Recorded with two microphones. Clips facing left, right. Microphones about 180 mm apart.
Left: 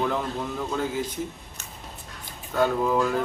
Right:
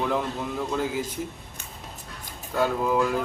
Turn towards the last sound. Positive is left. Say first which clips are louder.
# even
turn(degrees=-5)  # may be behind; listen again after turning